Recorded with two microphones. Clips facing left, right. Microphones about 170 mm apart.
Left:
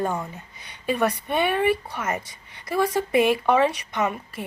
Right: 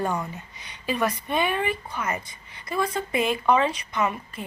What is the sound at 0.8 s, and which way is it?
Speech, 40° left (ahead or behind).